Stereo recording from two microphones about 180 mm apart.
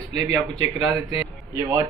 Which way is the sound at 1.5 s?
15° right (ahead or behind).